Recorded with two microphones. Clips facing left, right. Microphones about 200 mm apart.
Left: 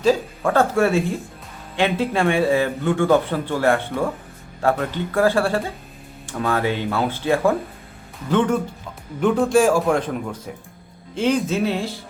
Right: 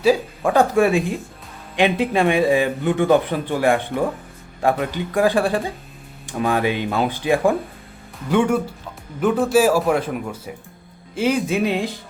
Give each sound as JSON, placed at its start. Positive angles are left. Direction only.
{"t": 0.0, "sound": "speech", "side_deg": -10}